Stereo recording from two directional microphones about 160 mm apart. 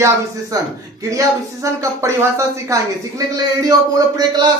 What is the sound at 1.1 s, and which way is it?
Speech, 20° right (ahead or behind).